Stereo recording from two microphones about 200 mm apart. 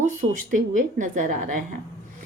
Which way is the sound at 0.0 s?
40° right (ahead or behind).